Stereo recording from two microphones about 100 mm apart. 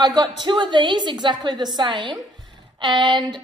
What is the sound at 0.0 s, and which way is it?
A woman's voice, 45° right (ahead or behind).